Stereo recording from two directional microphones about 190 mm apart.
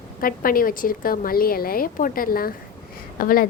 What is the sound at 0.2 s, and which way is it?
Speech, 50° left (ahead or behind).